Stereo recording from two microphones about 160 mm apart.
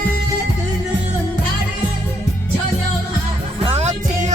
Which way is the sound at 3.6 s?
40° right (ahead or behind).